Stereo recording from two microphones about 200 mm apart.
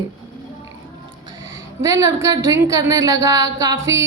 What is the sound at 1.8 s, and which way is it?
A woman's voice, 15° right (ahead or behind).